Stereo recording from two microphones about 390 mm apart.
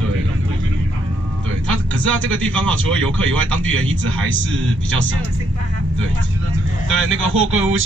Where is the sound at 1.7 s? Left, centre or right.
Right.